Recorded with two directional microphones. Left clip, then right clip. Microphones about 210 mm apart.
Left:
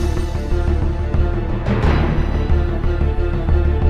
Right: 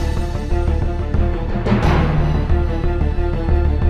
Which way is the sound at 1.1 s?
Centre (ahead or behind).